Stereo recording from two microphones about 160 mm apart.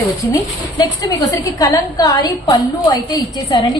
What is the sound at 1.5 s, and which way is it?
A woman's voice, 20° left (ahead or behind).